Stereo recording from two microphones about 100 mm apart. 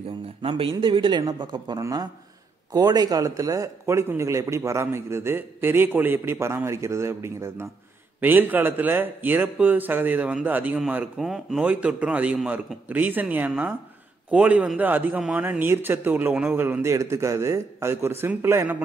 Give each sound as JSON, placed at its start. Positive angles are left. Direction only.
{"t": 0.4, "sound": "a man's voice", "side_deg": -60}
{"t": 11.1, "sound": "a man's voice", "side_deg": -5}